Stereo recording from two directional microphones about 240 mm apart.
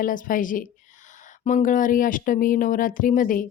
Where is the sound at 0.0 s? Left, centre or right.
Left.